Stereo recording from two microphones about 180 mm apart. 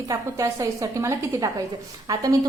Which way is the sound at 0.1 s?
15° right (ahead or behind).